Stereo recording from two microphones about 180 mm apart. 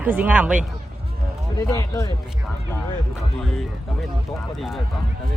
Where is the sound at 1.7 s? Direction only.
20° left (ahead or behind).